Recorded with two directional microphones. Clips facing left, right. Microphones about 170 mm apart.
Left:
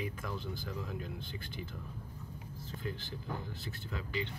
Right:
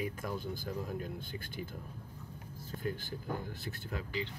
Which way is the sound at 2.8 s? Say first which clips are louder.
Right 4 dB; 50° right (ahead or behind).